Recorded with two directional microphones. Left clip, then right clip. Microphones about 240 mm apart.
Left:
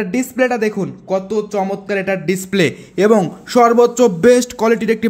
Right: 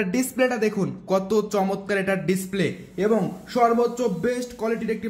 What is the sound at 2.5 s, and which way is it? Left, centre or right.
A man's voice, left.